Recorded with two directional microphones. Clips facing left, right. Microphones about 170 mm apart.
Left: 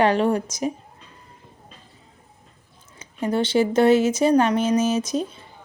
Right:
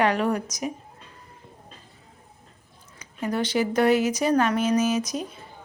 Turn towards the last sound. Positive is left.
turn(degrees=25)  # may be behind; listen again after turning